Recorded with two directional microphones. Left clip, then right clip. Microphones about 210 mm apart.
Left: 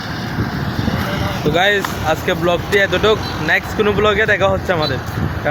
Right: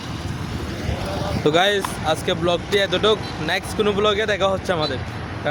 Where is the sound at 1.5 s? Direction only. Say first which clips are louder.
Left 4 dB; 35° right (ahead or behind).